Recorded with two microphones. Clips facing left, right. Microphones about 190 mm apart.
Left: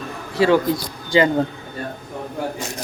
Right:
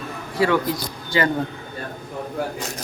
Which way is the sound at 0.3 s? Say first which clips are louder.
Left 4 dB; 25° left (ahead or behind).